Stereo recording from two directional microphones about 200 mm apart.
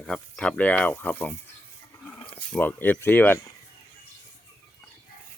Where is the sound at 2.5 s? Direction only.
10° left (ahead or behind).